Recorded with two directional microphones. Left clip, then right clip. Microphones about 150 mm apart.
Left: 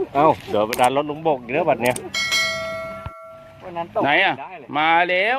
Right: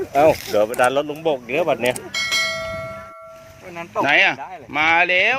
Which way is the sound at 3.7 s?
40° right (ahead or behind).